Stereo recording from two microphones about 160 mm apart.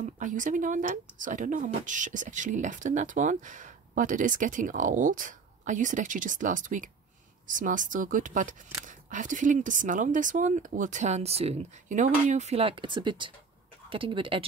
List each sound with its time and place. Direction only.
0.0 s speech: 50° right (ahead or behind); by 14.4 s 30° right (ahead or behind)